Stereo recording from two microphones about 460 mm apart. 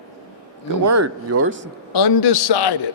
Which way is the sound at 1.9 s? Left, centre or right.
Left.